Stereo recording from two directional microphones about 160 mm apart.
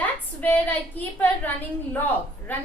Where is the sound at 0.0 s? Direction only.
10° left (ahead or behind).